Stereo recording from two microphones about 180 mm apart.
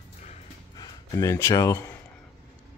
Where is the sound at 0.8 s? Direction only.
20° left (ahead or behind).